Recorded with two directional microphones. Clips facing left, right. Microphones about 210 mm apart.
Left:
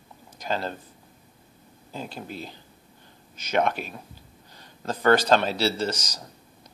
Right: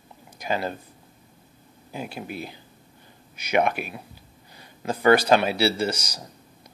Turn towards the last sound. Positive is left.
turn(degrees=-10)  # may be behind; listen again after turning